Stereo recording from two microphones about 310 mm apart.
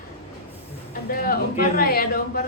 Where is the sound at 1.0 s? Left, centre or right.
Left.